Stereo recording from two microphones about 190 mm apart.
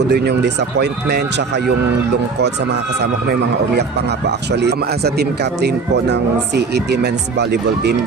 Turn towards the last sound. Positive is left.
turn(degrees=-60)  # may be behind; listen again after turning